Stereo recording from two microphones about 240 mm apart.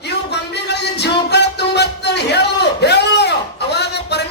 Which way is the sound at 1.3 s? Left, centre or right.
Left.